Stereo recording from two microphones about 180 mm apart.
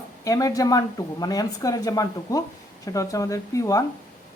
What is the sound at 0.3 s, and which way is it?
A woman's voice, 20° left (ahead or behind).